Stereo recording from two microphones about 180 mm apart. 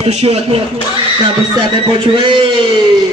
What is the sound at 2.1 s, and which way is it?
Speech, 30° right (ahead or behind).